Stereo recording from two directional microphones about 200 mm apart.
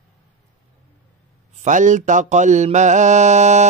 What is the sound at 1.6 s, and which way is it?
Mantra, 40° right (ahead or behind).